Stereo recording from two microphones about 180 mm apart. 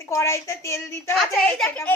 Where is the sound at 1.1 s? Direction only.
Centre (ahead or behind).